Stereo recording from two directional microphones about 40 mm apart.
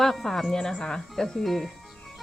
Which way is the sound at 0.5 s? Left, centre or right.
Centre.